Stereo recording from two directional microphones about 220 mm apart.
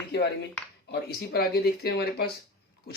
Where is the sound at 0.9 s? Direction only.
45° left (ahead or behind).